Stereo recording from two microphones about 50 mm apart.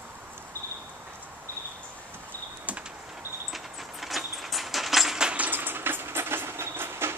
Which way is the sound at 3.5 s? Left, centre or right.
Centre.